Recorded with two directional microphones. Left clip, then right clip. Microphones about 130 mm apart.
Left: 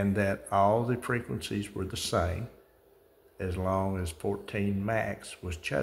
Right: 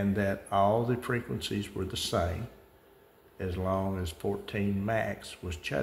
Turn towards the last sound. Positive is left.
turn(degrees=10)  # may be behind; listen again after turning